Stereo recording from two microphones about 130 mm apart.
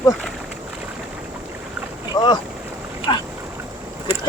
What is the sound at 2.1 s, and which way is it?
Speech, 35° left (ahead or behind).